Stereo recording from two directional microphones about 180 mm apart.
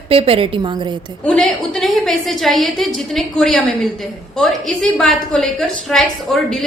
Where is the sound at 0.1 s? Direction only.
30° right (ahead or behind).